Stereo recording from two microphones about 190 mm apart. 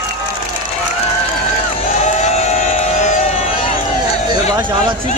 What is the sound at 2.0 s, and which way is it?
Run, 35° left (ahead or behind).